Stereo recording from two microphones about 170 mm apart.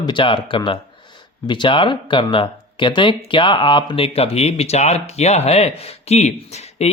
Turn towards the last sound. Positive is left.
turn(degrees=40)  # may be behind; listen again after turning